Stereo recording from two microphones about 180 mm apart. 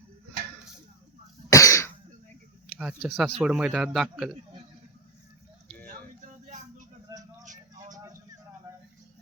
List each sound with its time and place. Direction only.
1.5 s cough: 15° left (ahead or behind)
2.7 s a man's voice: 5° right (ahead or behind)